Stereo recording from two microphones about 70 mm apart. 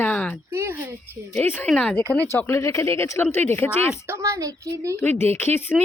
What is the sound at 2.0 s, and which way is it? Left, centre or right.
Speech, left.